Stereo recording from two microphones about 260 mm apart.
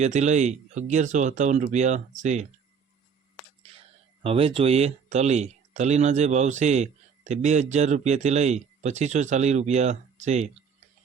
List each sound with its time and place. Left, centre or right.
0.0 s speech: right
4.2 s speech: right